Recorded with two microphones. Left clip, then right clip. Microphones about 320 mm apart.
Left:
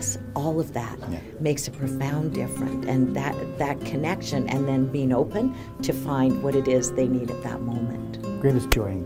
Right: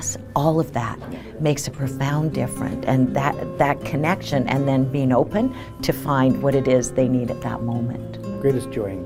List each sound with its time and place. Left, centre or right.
0.0 s speech: right
8.4 s speech: left